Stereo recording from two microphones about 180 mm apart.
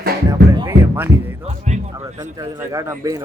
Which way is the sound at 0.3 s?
15° right (ahead or behind).